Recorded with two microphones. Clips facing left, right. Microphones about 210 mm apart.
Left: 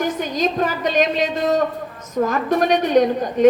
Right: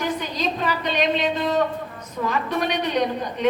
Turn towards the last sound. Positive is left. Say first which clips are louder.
# left 8 dB
turn(degrees=45)  # may be behind; listen again after turning